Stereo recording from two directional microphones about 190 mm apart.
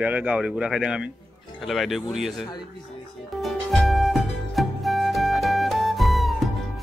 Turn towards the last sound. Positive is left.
turn(degrees=0)  # may be behind; listen again after turning